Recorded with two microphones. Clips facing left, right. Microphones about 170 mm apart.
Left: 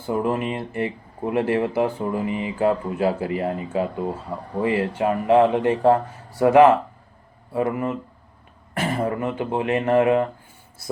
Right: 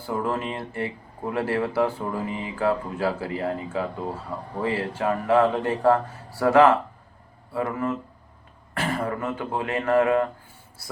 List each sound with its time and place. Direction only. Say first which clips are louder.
0.0 s speech: left 4 dB; 20° left (ahead or behind)